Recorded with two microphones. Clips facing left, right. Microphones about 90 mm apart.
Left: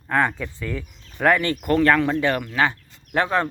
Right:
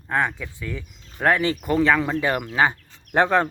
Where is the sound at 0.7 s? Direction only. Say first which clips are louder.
Left 3 dB; 5° right (ahead or behind).